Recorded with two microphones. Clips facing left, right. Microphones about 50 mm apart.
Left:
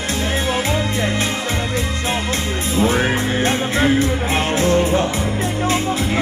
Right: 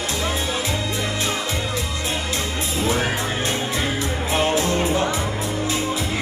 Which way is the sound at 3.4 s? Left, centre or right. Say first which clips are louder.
Left 6 dB; left.